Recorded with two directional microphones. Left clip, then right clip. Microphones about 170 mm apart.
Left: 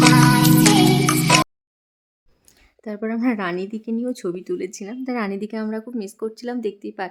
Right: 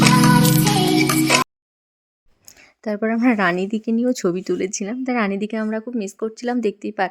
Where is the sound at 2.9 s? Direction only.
25° right (ahead or behind).